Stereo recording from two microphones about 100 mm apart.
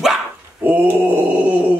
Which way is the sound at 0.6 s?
15° right (ahead or behind).